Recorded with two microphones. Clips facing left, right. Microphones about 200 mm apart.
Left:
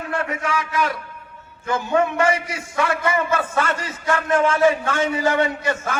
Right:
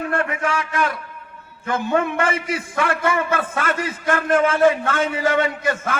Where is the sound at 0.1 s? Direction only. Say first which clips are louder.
Left 1 dB; 55° right (ahead or behind).